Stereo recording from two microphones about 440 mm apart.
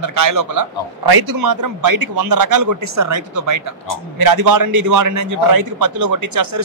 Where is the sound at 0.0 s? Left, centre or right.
Right.